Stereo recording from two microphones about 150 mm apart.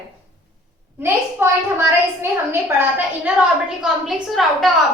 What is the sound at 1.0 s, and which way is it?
A child's voice, 15° right (ahead or behind).